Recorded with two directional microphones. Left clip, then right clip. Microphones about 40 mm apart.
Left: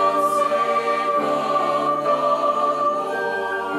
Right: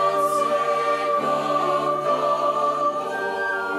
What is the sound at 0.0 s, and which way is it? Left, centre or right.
Music, left.